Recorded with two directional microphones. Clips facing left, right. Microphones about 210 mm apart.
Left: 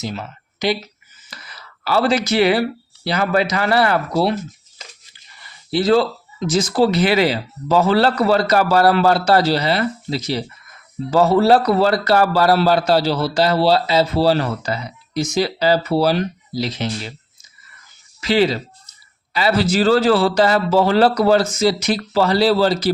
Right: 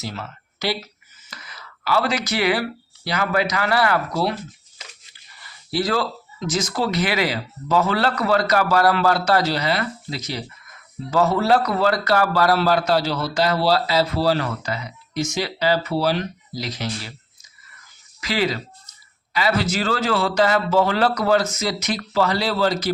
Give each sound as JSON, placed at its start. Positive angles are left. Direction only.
{"t": 0.0, "sound": "speech", "side_deg": 15}
{"t": 1.3, "sound": "speech", "side_deg": 35}
{"t": 5.7, "sound": "a man's voice", "side_deg": 25}
{"t": 18.2, "sound": "a man's voice", "side_deg": 30}